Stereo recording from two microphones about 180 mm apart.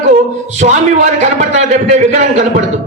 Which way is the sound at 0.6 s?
40° right (ahead or behind).